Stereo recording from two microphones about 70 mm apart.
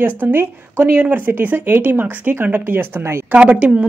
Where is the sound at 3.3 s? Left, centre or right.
Centre.